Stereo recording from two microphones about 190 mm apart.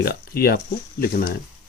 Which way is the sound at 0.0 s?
55° left (ahead or behind).